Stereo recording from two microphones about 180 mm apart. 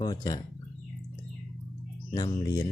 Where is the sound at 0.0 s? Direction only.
25° left (ahead or behind).